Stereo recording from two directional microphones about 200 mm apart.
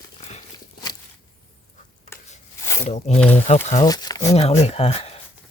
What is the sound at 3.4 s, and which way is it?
Speech, 35° left (ahead or behind).